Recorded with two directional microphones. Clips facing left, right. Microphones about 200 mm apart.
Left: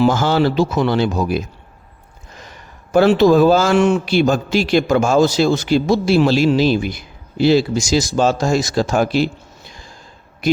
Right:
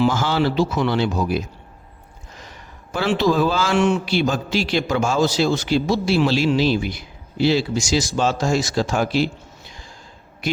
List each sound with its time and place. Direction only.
0.0 s a man's voice: 45° left (ahead or behind)
2.9 s a man's voice: 50° left (ahead or behind)